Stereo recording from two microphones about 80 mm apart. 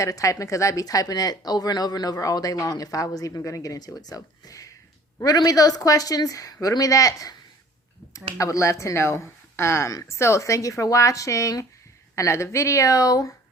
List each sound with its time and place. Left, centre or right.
0.0 s speech: left